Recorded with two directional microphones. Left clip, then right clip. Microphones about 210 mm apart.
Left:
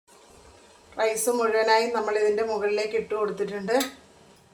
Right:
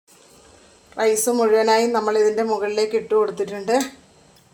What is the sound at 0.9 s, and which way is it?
Speech, 50° right (ahead or behind).